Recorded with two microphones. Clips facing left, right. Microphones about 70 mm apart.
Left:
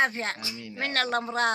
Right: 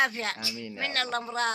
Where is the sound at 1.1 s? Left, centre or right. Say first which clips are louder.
Left 4 dB; left.